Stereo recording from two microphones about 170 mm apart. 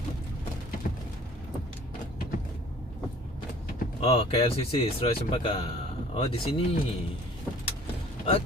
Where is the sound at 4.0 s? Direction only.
35° left (ahead or behind).